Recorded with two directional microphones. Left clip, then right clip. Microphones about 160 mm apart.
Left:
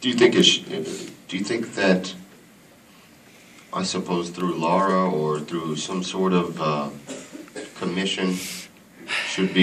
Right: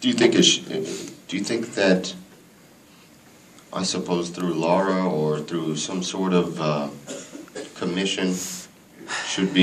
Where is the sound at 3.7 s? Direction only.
55° right (ahead or behind).